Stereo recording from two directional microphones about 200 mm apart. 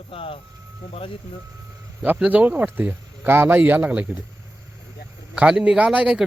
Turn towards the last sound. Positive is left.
turn(degrees=-5)  # may be behind; listen again after turning